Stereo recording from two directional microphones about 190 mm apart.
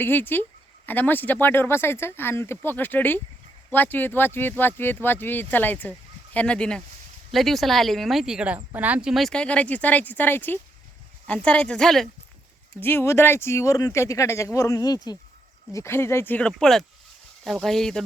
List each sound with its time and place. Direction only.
0.0 s speech: 10° left (ahead or behind)